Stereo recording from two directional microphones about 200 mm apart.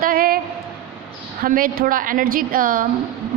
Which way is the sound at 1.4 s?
45° right (ahead or behind).